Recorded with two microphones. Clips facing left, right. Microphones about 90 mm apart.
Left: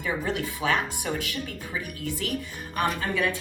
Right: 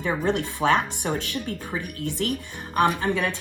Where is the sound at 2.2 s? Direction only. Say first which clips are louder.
Right 5 dB; 40° right (ahead or behind).